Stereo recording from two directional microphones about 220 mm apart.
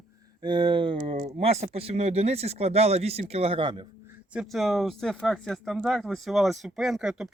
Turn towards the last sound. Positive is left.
turn(degrees=-5)  # may be behind; listen again after turning